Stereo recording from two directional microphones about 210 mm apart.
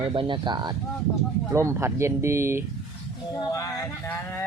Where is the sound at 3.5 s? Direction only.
10° left (ahead or behind).